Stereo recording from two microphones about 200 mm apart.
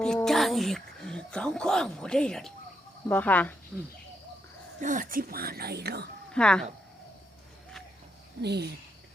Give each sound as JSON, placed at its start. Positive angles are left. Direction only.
{"t": 0.0, "sound": "speech", "side_deg": 5}
{"t": 3.7, "sound": "speech", "side_deg": 0}
{"t": 4.8, "sound": "speech", "side_deg": -40}
{"t": 6.3, "sound": "speech", "side_deg": 5}
{"t": 8.4, "sound": "speech", "side_deg": -55}